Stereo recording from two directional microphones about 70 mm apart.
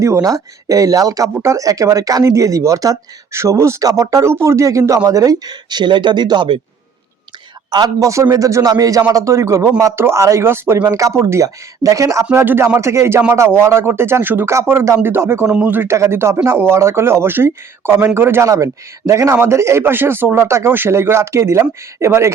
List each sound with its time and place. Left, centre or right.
0.0 s speech: right
1.3 s speech: right
7.9 s speech: right
9.1 s speech: right
10.8 s speech: right
11.4 s speech: right
15.4 s a man's voice: centre
15.9 s speech: right
18.4 s speech: right